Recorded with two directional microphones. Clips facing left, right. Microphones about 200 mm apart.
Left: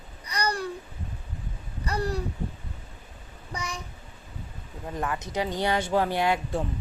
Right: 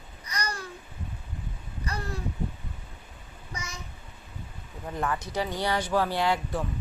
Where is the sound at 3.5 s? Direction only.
35° left (ahead or behind).